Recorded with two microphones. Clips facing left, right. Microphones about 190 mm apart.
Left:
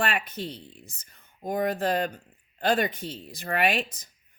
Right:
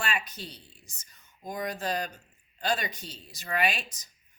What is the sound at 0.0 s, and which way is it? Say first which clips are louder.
Speech: left 5 dB; 55° left (ahead or behind).